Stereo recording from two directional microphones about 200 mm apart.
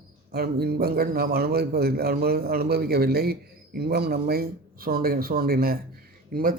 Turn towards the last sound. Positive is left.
turn(degrees=-45)  # may be behind; listen again after turning